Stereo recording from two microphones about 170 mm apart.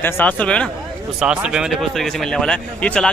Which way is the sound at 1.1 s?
5° right (ahead or behind).